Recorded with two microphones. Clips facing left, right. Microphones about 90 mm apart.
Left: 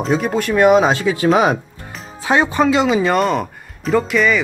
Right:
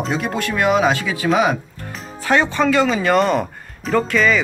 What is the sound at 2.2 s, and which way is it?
Speech, 15° left (ahead or behind).